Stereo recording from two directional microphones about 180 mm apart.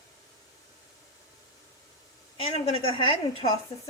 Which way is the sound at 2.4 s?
30° left (ahead or behind).